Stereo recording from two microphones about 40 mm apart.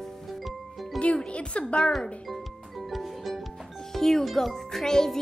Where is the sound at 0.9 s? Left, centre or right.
Left.